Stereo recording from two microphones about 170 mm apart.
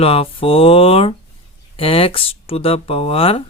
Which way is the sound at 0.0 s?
35° left (ahead or behind).